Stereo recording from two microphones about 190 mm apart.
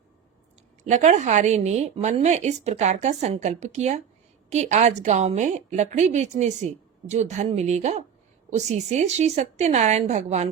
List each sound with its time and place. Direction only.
0.9 s a woman's voice: 35° right (ahead or behind)